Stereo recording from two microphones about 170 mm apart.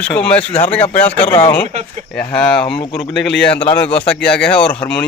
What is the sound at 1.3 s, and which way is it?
Speech, 35° left (ahead or behind).